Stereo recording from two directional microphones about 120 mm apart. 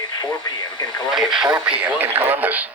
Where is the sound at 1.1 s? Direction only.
Centre (ahead or behind).